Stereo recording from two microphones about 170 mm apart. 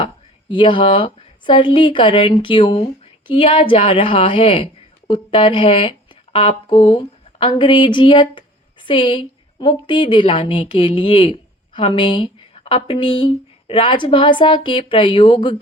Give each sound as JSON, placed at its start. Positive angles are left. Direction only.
{"t": 0.5, "sound": "a woman's voice", "side_deg": 30}